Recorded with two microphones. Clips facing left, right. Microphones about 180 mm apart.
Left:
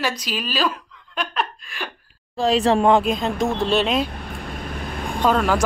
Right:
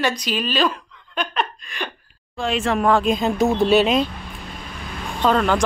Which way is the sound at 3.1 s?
5° right (ahead or behind).